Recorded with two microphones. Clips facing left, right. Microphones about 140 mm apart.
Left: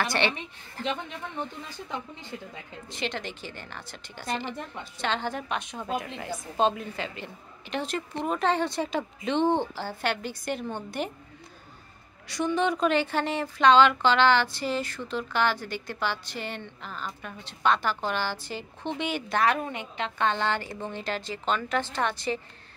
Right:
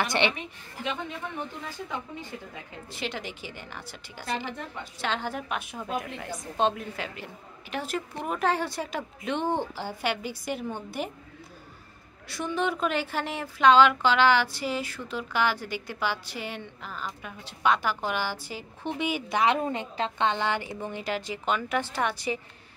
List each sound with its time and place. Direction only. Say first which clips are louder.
0.0 s a woman's voice: right 1 dB; 20° right (ahead or behind)
2.9 s a woman's voice: left 2 dB; 5° right (ahead or behind)
12.3 s a woman's voice: left 3 dB; 5° right (ahead or behind); by 20.1 s 30° right (ahead or behind)
20.2 s a woman's voice: left 1 dB; 15° right (ahead or behind)